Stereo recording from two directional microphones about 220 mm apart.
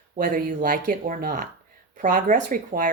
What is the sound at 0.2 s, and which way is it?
Speech, 40° right (ahead or behind).